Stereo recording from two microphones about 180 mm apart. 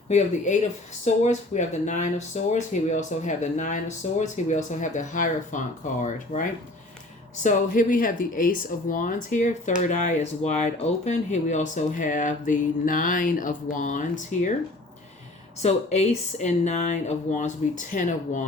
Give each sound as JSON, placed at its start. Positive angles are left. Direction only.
{"t": 1.0, "sound": "speech", "side_deg": 40}
{"t": 7.4, "sound": "speech", "side_deg": 50}
{"t": 15.6, "sound": "speech", "side_deg": 40}